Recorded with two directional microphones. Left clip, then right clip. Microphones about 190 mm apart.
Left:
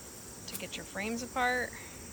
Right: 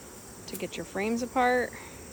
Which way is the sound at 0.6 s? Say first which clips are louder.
Right 6 dB; 30° right (ahead or behind).